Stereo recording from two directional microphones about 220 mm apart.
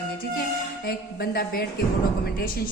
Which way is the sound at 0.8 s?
45° left (ahead or behind).